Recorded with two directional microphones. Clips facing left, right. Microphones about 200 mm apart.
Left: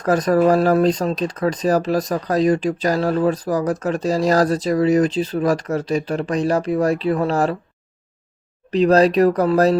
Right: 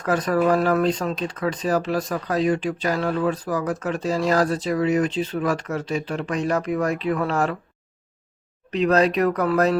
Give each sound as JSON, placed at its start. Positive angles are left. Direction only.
{"t": 0.0, "sound": "speech", "side_deg": 40}
{"t": 8.7, "sound": "speech", "side_deg": 35}